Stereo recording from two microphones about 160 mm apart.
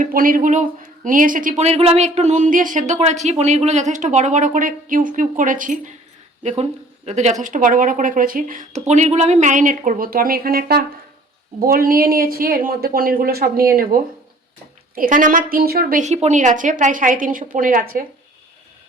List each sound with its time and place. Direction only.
0.0 s speech: 60° right (ahead or behind)
6.4 s a woman's voice: 45° right (ahead or behind)